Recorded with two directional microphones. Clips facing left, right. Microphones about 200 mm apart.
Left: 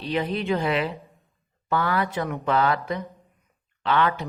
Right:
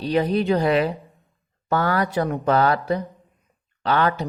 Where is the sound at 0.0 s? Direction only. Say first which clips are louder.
Right 6 dB; 40° right (ahead or behind).